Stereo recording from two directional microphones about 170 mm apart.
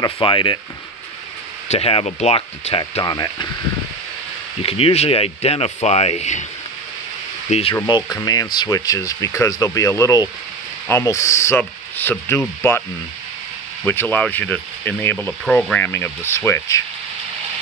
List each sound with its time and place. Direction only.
0.0 s speech: 30° left (ahead or behind)
1.7 s speech: 35° left (ahead or behind)
4.6 s speech: 35° left (ahead or behind)
7.7 s speech: 25° left (ahead or behind)
13.8 s speech: 10° left (ahead or behind)